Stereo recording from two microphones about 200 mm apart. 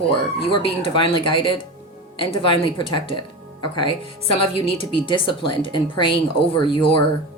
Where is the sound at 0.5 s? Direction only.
25° left (ahead or behind).